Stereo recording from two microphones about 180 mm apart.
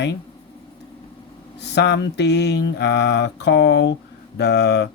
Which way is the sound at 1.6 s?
70° left (ahead or behind).